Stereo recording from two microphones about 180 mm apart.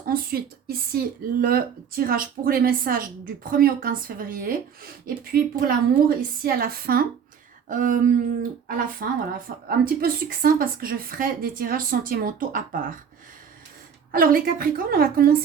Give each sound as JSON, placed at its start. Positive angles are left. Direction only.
{"t": 0.0, "sound": "speech", "side_deg": -55}
{"t": 14.1, "sound": "speech", "side_deg": -50}